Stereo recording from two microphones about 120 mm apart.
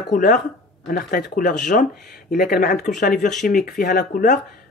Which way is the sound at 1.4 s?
90° left.